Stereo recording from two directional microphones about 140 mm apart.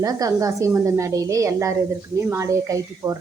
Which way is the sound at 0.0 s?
25° right (ahead or behind).